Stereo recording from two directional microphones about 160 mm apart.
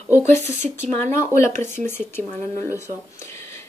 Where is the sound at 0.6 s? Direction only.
50° right (ahead or behind).